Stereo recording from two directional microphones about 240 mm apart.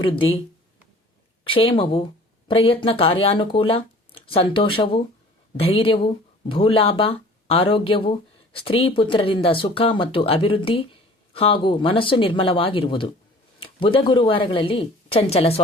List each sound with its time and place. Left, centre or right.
0.0 s speech: left
1.5 s speech: left